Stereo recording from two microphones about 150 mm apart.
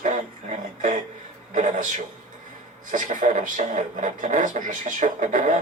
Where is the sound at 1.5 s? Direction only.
55° right (ahead or behind).